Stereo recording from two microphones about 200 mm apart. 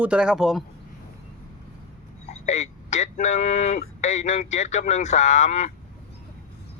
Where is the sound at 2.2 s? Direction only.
35° left (ahead or behind).